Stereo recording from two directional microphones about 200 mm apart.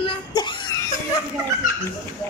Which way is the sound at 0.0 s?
20° left (ahead or behind).